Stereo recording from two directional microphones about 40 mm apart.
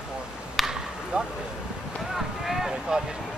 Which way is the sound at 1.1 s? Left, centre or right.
Right.